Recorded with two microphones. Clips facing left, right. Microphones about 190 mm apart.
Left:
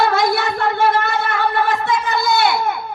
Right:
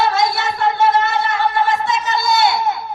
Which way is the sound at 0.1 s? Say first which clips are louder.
Left 1 dB; 55° left (ahead or behind).